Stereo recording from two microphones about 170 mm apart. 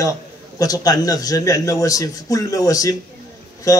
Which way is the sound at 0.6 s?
20° left (ahead or behind).